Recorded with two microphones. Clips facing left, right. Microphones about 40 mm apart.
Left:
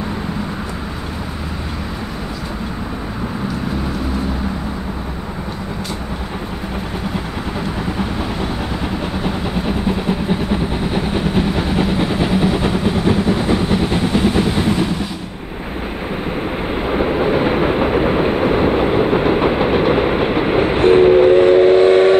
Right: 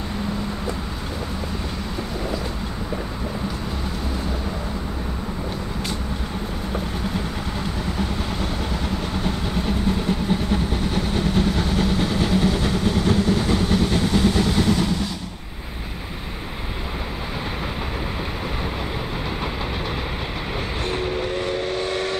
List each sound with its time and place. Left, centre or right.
9.2 s vehicle: centre
16.8 s train: left